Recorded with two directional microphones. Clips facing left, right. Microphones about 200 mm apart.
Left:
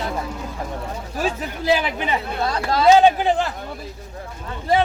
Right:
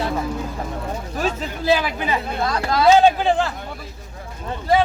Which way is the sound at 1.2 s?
15° left (ahead or behind).